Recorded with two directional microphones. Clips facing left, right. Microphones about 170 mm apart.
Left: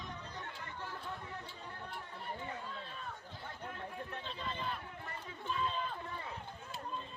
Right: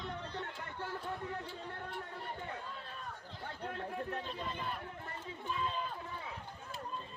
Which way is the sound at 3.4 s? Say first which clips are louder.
Right 4 dB; 60° right (ahead or behind).